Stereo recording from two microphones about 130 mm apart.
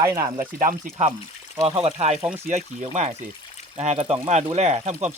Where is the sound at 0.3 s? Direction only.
90° right.